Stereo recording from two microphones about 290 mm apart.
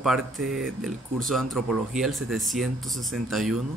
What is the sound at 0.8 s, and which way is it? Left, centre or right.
Speech, centre.